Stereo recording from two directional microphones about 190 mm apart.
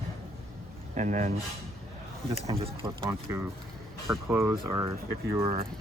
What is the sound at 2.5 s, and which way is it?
Speech, 30° right (ahead or behind).